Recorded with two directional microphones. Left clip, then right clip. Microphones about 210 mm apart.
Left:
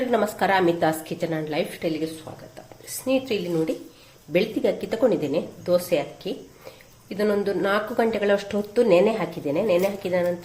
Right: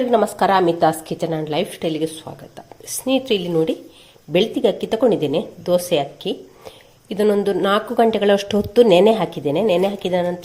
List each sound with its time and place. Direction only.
0.1 s a woman's voice: 30° right (ahead or behind)
3.1 s speech: 40° right (ahead or behind)